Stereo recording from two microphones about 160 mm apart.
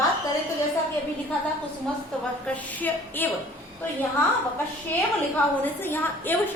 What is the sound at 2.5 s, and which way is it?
Speech, 10° left (ahead or behind).